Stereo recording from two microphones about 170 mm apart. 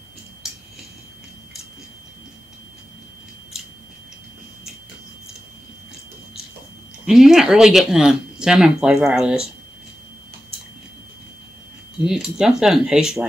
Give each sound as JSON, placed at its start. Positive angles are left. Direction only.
{"t": 7.1, "sound": "speech", "side_deg": -5}
{"t": 12.0, "sound": "speech", "side_deg": -5}